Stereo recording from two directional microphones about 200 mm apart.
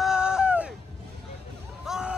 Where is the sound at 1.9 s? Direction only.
5° right (ahead or behind).